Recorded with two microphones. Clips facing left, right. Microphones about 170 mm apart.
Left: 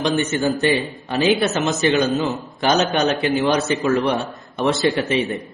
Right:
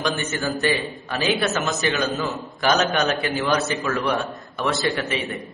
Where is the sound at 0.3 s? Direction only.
20° left (ahead or behind).